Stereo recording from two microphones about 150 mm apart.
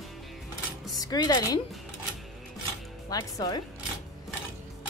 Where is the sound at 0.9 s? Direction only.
25° left (ahead or behind).